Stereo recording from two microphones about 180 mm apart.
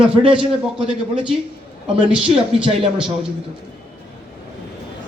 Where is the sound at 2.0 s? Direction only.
30° right (ahead or behind).